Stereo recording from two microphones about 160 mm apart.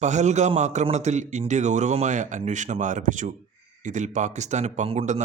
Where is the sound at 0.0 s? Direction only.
50° right (ahead or behind).